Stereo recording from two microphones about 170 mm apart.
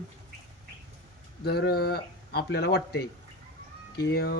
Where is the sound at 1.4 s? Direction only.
70° left (ahead or behind).